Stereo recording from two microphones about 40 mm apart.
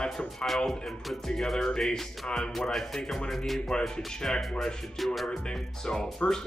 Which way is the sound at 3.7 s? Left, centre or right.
Left.